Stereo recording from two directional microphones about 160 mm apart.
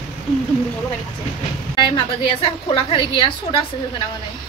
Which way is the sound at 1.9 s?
30° left (ahead or behind).